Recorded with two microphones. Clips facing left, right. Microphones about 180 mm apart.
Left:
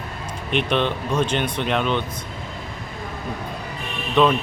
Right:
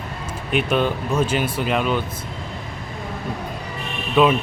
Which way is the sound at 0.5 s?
5° right (ahead or behind).